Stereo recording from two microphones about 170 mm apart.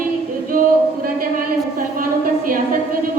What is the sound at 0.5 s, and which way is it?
Singing, 60° right (ahead or behind).